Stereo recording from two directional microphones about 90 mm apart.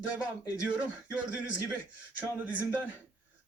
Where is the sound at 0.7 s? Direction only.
15° right (ahead or behind).